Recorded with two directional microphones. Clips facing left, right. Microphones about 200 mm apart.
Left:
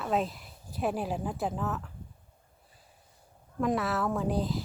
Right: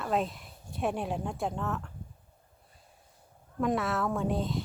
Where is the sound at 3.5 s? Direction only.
Centre (ahead or behind).